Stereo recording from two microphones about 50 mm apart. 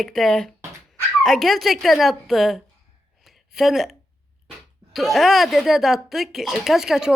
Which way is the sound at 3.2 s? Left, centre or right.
Centre.